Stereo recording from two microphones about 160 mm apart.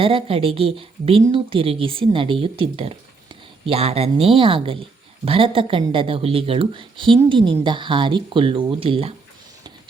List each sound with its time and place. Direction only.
0.0 s a woman's voice: 35° right (ahead or behind)